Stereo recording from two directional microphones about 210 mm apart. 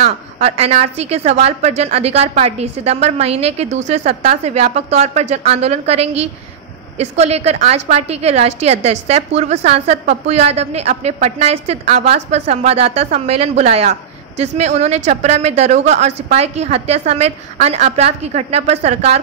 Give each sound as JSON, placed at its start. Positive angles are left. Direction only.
{"t": 0.0, "sound": "a woman's voice", "side_deg": -30}